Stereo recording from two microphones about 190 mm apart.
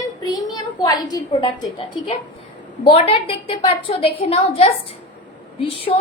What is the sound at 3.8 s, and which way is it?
A woman's voice, 30° left (ahead or behind).